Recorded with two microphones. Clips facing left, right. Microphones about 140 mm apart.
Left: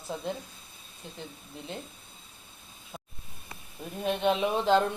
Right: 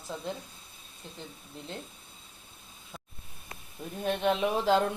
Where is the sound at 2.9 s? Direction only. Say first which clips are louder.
Left 3 dB; 20° left (ahead or behind).